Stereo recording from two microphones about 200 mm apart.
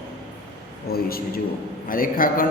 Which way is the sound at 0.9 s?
50° left (ahead or behind).